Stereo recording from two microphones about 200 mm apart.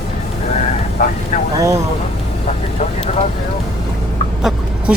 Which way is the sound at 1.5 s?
15° right (ahead or behind).